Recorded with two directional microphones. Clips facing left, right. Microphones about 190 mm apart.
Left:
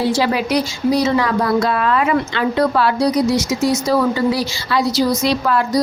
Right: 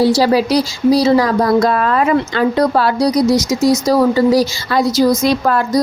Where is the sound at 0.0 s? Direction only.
35° right (ahead or behind).